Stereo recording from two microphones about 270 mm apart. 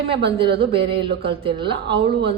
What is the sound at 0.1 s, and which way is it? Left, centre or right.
A woman's voice, centre.